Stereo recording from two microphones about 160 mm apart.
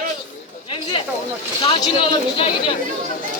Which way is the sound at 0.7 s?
30° left (ahead or behind).